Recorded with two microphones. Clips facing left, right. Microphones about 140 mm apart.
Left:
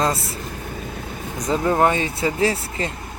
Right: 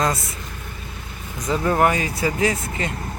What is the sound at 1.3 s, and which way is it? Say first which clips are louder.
Speech: left 1 dB; 35° left (ahead or behind).